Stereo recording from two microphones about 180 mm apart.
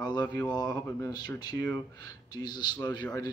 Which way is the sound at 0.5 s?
20° left (ahead or behind).